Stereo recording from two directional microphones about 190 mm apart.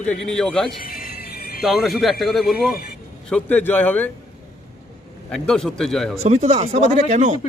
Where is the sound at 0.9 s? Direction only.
50° left (ahead or behind).